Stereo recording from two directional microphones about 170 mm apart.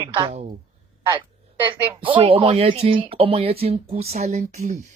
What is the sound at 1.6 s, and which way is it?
Speech, 30° right (ahead or behind).